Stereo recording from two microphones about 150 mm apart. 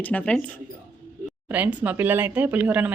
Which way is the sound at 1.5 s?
10° right (ahead or behind).